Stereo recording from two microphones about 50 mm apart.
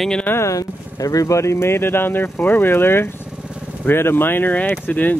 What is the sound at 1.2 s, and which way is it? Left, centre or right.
Speech, left.